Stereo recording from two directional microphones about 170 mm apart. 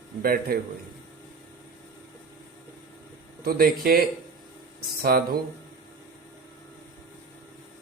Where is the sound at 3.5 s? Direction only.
60° right (ahead or behind).